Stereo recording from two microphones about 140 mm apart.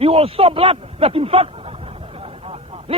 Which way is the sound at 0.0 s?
45° right (ahead or behind).